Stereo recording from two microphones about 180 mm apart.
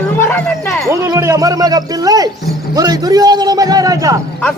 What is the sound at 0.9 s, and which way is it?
A man's voice, 15° right (ahead or behind).